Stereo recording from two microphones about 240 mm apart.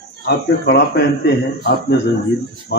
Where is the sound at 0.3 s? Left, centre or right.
Left.